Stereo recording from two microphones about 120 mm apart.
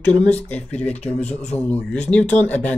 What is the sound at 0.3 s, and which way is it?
Speech, 10° left (ahead or behind).